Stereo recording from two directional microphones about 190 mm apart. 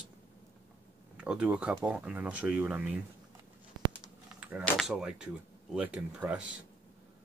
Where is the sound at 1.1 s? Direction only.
5° right (ahead or behind).